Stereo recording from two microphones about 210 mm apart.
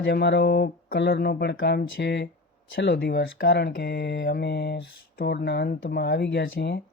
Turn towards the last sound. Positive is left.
turn(degrees=55)  # may be behind; listen again after turning